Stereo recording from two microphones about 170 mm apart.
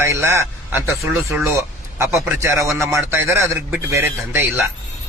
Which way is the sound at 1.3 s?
10° right (ahead or behind).